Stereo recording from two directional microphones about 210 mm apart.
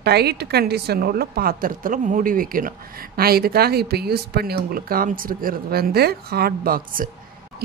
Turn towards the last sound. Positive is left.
turn(degrees=-45)  # may be behind; listen again after turning